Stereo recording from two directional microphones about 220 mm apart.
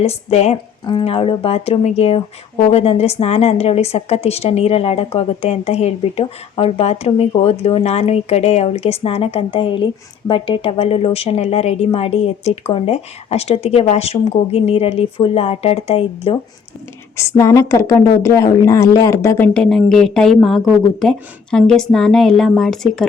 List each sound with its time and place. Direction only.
0.0 s a woman's voice: 30° left (ahead or behind)
17.2 s a woman's voice: 15° left (ahead or behind)